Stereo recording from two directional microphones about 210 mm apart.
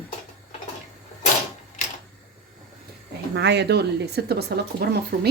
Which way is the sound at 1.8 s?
35° left (ahead or behind).